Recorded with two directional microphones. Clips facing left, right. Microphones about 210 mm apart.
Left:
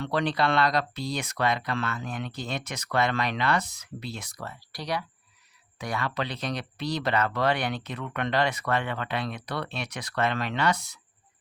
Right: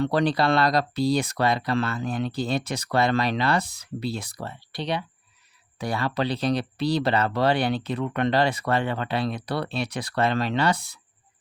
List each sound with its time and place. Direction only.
0.0 s speech: 35° right (ahead or behind)